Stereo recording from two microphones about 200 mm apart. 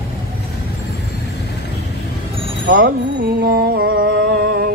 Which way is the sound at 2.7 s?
50° right (ahead or behind).